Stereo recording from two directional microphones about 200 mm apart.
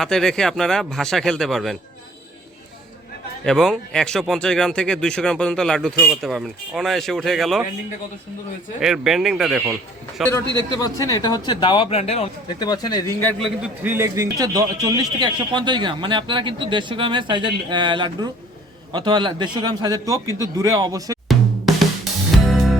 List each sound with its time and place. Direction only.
0.0 s speech: centre (ahead or behind)
3.4 s speech: centre (ahead or behind)
8.8 s speech: centre (ahead or behind)
10.8 s speech: 20° left (ahead or behind)
13.4 s a man's voice: 5° right (ahead or behind)
22.4 s music: centre (ahead or behind)